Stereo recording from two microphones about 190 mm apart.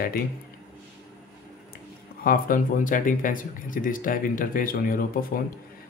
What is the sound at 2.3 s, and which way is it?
Speech, 45° left (ahead or behind).